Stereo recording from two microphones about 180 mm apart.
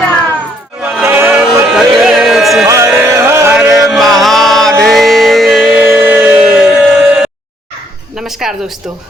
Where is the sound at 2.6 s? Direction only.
15° right (ahead or behind).